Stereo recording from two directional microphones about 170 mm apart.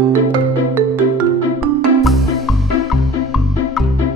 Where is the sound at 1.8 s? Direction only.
Centre (ahead or behind).